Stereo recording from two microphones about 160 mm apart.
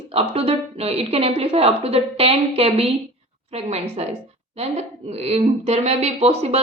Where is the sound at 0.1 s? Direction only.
40° right (ahead or behind).